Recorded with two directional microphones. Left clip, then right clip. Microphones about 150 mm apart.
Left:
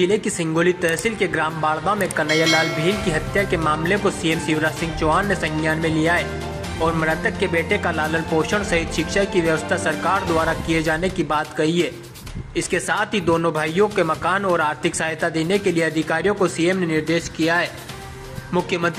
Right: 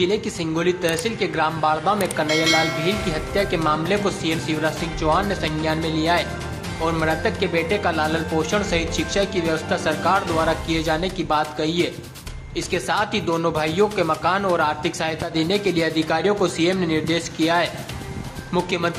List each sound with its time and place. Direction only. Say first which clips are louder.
0.0 s speech: left 2 dB; 20° left (ahead or behind)
2.2 s speech: left 1 dB; centre (ahead or behind)
3.1 s speech: left 2 dB; 20° left (ahead or behind)
15.3 s a man's voice: right 3 dB; 5° left (ahead or behind)